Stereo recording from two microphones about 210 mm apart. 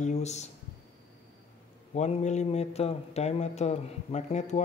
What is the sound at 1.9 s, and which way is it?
A man's voice, 35° left (ahead or behind).